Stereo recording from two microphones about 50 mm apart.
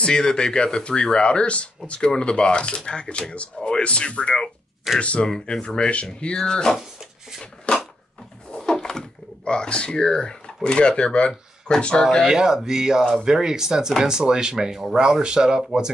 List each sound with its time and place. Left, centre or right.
0.0 s speech: centre
5.3 s speech: centre
7.7 s a sound: left
8.5 s a sound: centre
9.4 s speech: centre
12.0 s speech: centre
12.3 s speech: centre